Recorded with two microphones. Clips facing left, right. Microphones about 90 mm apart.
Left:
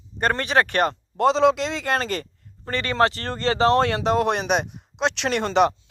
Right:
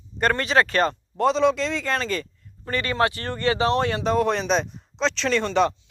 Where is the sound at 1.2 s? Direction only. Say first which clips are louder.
Left 2 dB; 90° left.